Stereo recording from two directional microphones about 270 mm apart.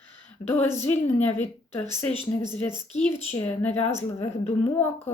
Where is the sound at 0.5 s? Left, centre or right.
Centre.